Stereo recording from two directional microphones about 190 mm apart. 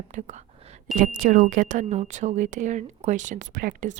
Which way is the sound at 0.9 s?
45° right (ahead or behind).